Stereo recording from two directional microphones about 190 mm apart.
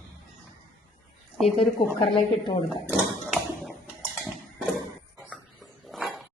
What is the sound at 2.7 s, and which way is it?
Tap, 5° right (ahead or behind).